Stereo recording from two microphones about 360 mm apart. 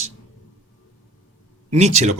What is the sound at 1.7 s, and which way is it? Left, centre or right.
Speech, centre.